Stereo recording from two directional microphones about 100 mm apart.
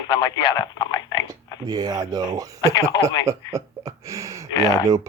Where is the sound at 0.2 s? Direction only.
40° left (ahead or behind).